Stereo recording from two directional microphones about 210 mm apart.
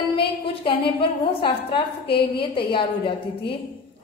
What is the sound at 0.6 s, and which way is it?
A woman's voice, 25° left (ahead or behind).